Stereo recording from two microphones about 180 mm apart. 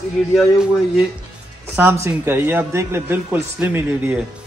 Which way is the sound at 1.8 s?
10° right (ahead or behind).